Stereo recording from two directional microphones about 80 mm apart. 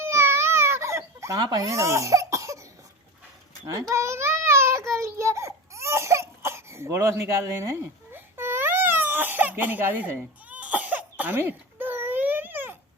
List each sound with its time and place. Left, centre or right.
0.0 s baby cry: right
1.4 s speech: right
3.7 s child singing: right
10.5 s cough: centre